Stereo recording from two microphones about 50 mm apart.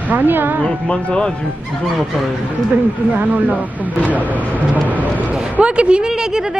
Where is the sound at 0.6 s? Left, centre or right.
Left.